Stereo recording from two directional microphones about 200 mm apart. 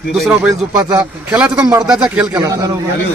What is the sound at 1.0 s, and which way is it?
Speech, 5° right (ahead or behind).